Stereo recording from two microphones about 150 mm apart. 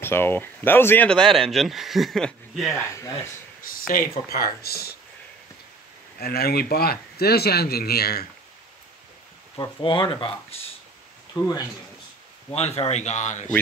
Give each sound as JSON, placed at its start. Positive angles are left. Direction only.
{"t": 0.0, "sound": "speech", "side_deg": 15}
{"t": 4.3, "sound": "speech", "side_deg": 90}
{"t": 6.1, "sound": "speech", "side_deg": 90}
{"t": 9.6, "sound": "speech", "side_deg": 30}
{"t": 11.3, "sound": "speech", "side_deg": 20}
{"t": 12.5, "sound": "speech", "side_deg": 45}